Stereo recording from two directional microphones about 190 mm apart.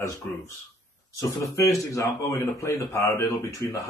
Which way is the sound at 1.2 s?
15° left (ahead or behind).